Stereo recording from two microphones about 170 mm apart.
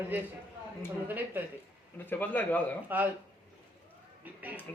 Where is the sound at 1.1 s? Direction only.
10° right (ahead or behind).